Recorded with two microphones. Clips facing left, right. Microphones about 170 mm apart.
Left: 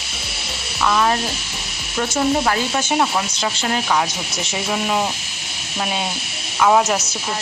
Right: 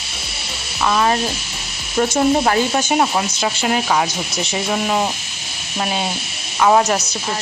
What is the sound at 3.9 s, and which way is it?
Speech, centre (ahead or behind).